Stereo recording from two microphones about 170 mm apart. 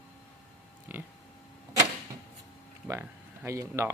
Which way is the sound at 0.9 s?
10° right (ahead or behind).